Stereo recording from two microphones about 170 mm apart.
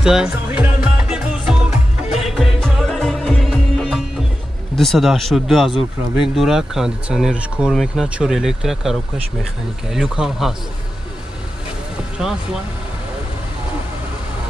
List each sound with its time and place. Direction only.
0.0 s music: 5° right (ahead or behind)
4.7 s speech: centre (ahead or behind)